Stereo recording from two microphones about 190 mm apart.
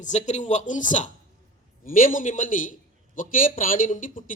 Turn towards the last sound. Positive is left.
turn(degrees=45)  # may be behind; listen again after turning